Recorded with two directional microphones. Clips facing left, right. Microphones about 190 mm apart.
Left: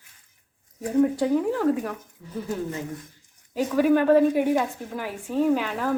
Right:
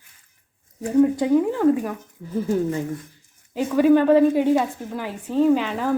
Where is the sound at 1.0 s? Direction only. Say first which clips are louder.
Right 3 dB; 5° right (ahead or behind).